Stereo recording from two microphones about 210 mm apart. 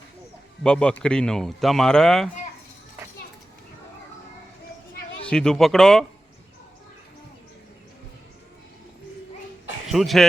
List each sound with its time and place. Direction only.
0.6 s speech: 5° left (ahead or behind)
5.2 s speech: 5° left (ahead or behind)
9.8 s speech: centre (ahead or behind)